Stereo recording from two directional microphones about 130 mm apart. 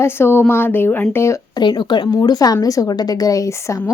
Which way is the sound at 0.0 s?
20° left (ahead or behind).